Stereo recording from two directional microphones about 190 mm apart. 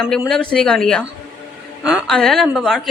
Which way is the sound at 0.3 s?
5° left (ahead or behind).